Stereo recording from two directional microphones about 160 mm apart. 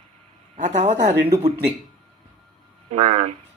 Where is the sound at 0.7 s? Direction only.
45° right (ahead or behind).